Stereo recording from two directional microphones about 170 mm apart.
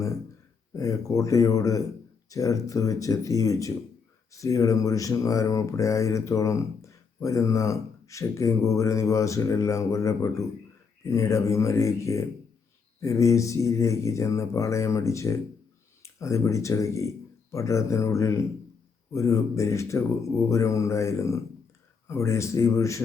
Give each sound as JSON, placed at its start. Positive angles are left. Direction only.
{"t": 0.7, "sound": "speech", "side_deg": 20}